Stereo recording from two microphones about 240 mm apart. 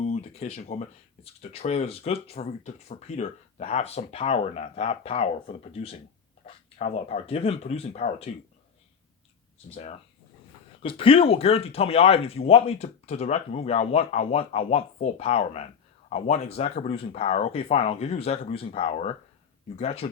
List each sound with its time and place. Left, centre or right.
0.0 s speech: left
10.8 s speech: left